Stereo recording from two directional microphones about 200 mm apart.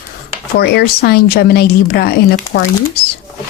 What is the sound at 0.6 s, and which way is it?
Speech, 55° left (ahead or behind).